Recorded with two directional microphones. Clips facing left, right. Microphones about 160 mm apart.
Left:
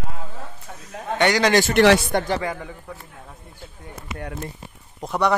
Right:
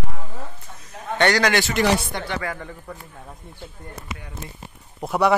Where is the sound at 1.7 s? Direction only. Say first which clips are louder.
Left 9 dB; 90° left.